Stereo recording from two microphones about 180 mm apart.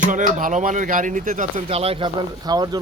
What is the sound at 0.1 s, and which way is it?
Speech, 45° right (ahead or behind).